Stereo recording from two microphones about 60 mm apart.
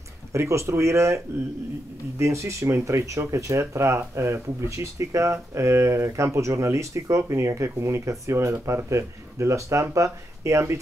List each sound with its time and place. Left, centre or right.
0.3 s speech: right